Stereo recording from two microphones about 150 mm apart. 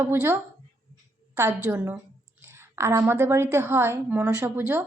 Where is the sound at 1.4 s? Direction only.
15° right (ahead or behind).